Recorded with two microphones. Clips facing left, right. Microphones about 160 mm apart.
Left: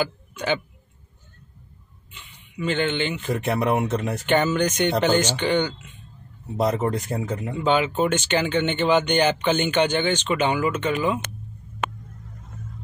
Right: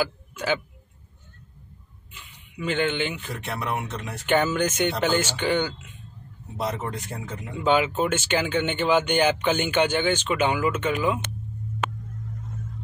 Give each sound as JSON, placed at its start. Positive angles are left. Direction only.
{"t": 0.0, "sound": "speech", "side_deg": -5}
{"t": 2.1, "sound": "speech", "side_deg": -5}
{"t": 3.3, "sound": "speech", "side_deg": 50}
{"t": 4.3, "sound": "speech", "side_deg": -5}
{"t": 6.5, "sound": "speech", "side_deg": 45}
{"t": 7.6, "sound": "speech", "side_deg": -5}